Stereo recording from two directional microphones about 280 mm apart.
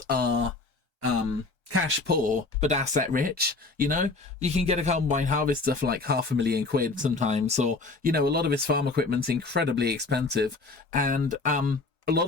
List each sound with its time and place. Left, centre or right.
0.0 s speech: right
2.0 s speech: right